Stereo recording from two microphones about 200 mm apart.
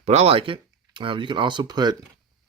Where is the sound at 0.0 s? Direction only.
35° right (ahead or behind).